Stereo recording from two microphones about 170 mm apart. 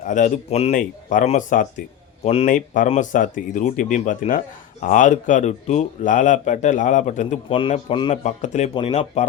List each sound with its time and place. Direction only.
0.0 s speech: 45° left (ahead or behind)
2.2 s speech: 35° left (ahead or behind)
2.5 s speech: 50° left (ahead or behind)
7.5 s speech: 35° left (ahead or behind)
8.1 s speech: 45° left (ahead or behind)